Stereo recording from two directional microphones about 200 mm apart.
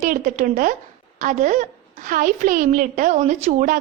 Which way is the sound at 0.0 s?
40° right (ahead or behind).